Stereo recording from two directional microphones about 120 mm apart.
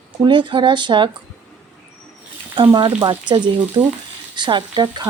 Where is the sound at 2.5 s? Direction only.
40° right (ahead or behind).